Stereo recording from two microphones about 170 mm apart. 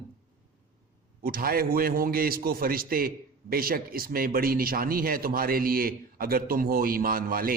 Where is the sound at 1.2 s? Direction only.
60° right (ahead or behind).